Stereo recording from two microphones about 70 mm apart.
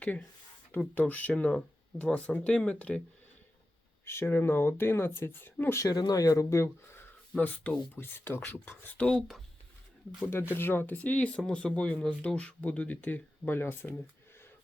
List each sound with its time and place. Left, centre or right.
0.0 s speech: centre
4.0 s speech: left
5.8 s speech: left
7.3 s speech: left
7.9 s speech: left
9.0 s speech: centre
10.5 s speech: left